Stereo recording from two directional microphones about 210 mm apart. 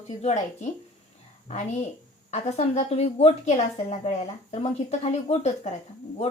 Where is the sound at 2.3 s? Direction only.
30° left (ahead or behind).